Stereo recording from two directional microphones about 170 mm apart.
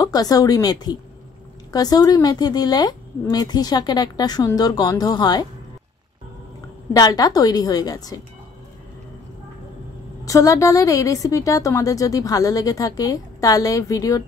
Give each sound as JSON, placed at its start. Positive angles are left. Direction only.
{"t": 0.0, "sound": "a woman's voice", "side_deg": 20}
{"t": 6.9, "sound": "a woman's voice", "side_deg": 20}
{"t": 10.2, "sound": "a woman's voice", "side_deg": 20}